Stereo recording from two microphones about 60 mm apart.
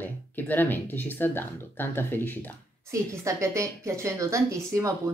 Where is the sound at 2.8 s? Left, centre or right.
Right.